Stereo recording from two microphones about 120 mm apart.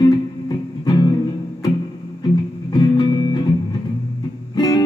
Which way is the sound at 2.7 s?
40° left (ahead or behind).